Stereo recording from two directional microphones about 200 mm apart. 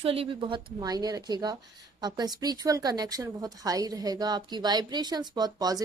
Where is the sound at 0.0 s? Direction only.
30° right (ahead or behind).